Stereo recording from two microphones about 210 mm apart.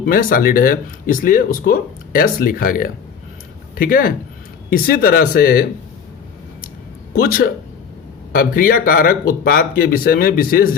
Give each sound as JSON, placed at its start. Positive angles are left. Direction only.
{"t": 0.0, "sound": "speech", "side_deg": 40}
{"t": 7.1, "sound": "a man's voice", "side_deg": 45}